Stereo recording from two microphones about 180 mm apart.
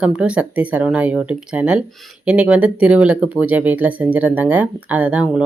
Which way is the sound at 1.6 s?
5° right (ahead or behind).